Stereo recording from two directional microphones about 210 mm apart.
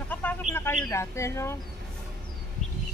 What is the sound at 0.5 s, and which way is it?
Bird, 10° left (ahead or behind).